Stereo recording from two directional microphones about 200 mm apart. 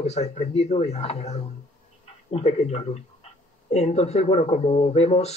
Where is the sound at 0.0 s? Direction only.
35° left (ahead or behind).